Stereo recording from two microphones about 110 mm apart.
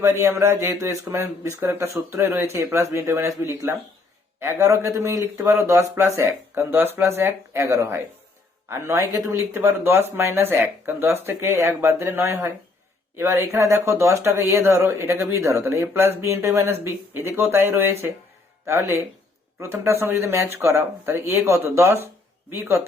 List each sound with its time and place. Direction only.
0.0 s speech: 25° right (ahead or behind)